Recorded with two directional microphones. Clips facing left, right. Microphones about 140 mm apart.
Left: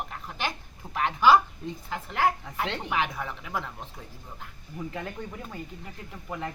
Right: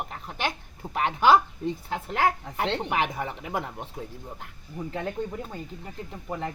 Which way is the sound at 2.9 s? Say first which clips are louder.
Right 2 dB; 50° right (ahead or behind).